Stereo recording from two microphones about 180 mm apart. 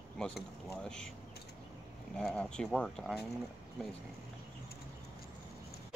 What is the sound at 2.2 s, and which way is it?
Speech, 5° left (ahead or behind).